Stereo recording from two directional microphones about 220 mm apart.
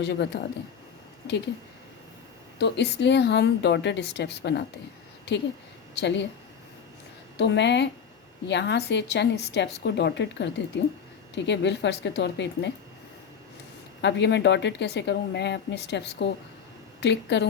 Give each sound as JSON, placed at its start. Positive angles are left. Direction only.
{"t": 0.0, "sound": "speech", "side_deg": 50}
{"t": 2.6, "sound": "speech", "side_deg": 50}
{"t": 5.9, "sound": "speech", "side_deg": 50}
{"t": 7.3, "sound": "speech", "side_deg": 50}
{"t": 14.0, "sound": "speech", "side_deg": 50}